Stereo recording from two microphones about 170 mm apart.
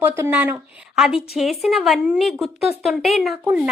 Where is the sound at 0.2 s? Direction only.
10° right (ahead or behind).